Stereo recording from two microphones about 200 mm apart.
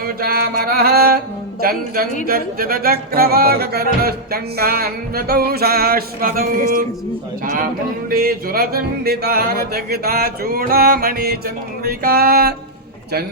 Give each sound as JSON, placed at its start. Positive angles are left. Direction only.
{"t": 0.0, "sound": "mantra", "side_deg": -50}
{"t": 1.6, "sound": "a woman's voice", "side_deg": -50}
{"t": 2.2, "sound": "music", "side_deg": -45}
{"t": 8.1, "sound": "music", "side_deg": -50}